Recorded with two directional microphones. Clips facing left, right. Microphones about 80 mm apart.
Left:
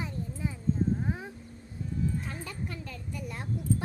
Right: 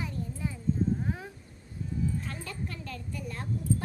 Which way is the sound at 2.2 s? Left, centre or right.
Centre.